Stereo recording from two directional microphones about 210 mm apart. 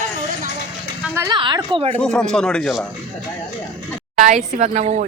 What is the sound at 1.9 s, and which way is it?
Speech, 5° left (ahead or behind).